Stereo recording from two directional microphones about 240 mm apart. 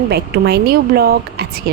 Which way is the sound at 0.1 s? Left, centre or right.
Right.